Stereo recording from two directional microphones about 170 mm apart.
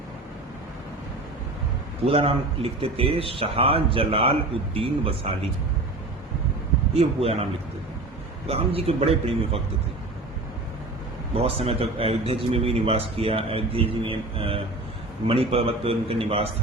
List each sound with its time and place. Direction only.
2.0 s speech: 35° right (ahead or behind)
6.9 s speech: 35° right (ahead or behind)
8.4 s speech: 35° right (ahead or behind)
11.3 s speech: 35° right (ahead or behind)